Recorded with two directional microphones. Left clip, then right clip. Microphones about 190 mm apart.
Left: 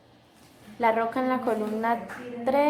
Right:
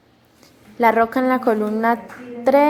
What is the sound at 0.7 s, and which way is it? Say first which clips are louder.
A woman's voice: right 8 dB; 35° right (ahead or behind).